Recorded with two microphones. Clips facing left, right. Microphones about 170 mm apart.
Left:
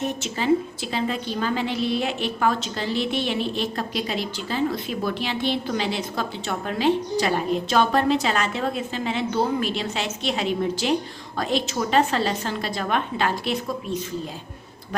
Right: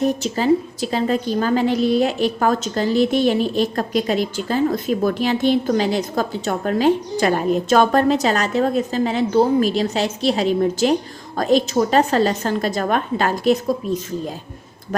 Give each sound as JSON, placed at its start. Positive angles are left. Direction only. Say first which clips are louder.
{"t": 0.0, "sound": "a woman's voice", "louder": "right 7 dB", "side_deg": -35}